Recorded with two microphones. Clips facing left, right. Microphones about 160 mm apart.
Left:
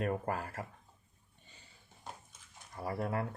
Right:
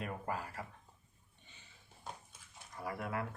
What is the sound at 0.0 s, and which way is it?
Speech, 50° left (ahead or behind).